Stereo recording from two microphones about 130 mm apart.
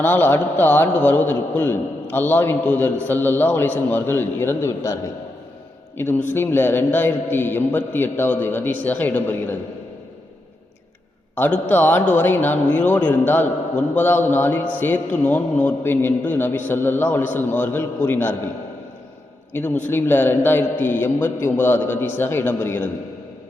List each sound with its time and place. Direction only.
0.0 s a man's voice: 15° left (ahead or behind)
6.0 s a man's voice: 15° left (ahead or behind)
11.3 s a man's voice: 15° left (ahead or behind)
19.8 s a man's voice: 15° left (ahead or behind)